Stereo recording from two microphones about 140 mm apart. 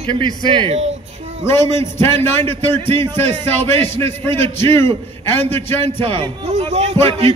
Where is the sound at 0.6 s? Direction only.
45° right (ahead or behind).